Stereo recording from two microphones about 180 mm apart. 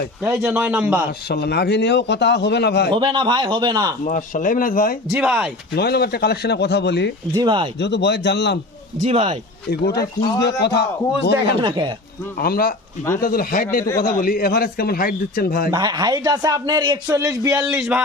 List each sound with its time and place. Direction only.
0.2 s a man's voice: 5° right (ahead or behind)
1.3 s a man's voice: 65° left (ahead or behind)
2.9 s a man's voice: 25° right (ahead or behind)
4.0 s speech: 45° left (ahead or behind)
5.1 s a man's voice: 5° right (ahead or behind)
5.7 s a man's voice: 65° left (ahead or behind)
7.3 s a man's voice: 25° right (ahead or behind)
7.8 s a man's voice: 70° left (ahead or behind)
9.0 s speech: 30° right (ahead or behind)
9.6 s a man's voice: 60° left (ahead or behind)
12.4 s a man's voice: 55° left (ahead or behind)
15.7 s a man's voice: 20° right (ahead or behind)